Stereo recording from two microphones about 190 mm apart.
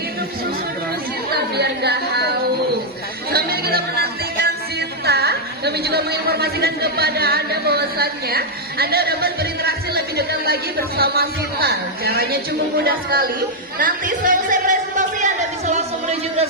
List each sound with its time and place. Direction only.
1.5 s music: 60° right (ahead or behind)
3.2 s music: 55° right (ahead or behind)
13.7 s a sound: 45° right (ahead or behind)